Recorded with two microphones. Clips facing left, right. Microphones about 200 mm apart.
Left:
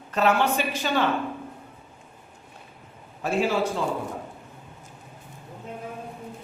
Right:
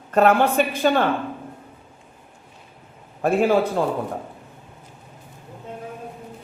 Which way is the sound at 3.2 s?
55° right (ahead or behind).